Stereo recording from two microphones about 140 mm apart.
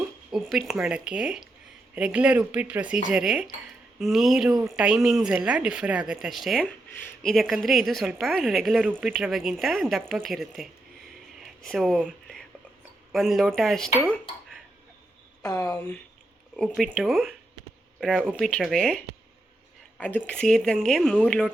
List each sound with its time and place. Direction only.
0.3 s a woman's voice: centre (ahead or behind)
11.3 s whispering: centre (ahead or behind)
13.1 s a woman's voice: centre (ahead or behind)
15.4 s speech: 25° left (ahead or behind)
16.6 s a woman's voice: 5° left (ahead or behind)